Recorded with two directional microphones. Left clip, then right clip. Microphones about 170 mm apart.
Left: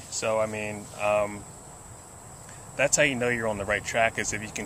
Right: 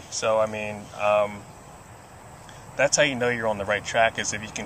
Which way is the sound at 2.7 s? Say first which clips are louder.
Right 2 dB; 20° left (ahead or behind).